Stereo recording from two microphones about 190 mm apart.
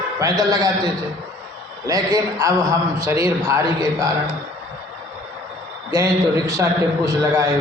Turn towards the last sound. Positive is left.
turn(degrees=-15)  # may be behind; listen again after turning